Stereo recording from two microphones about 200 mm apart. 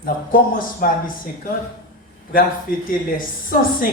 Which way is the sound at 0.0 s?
45° left (ahead or behind).